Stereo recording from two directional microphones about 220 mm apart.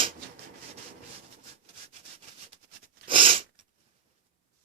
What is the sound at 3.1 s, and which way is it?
Sneeze, 25° right (ahead or behind).